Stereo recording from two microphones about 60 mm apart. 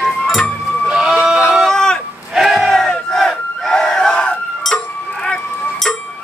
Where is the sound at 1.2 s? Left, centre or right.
Centre.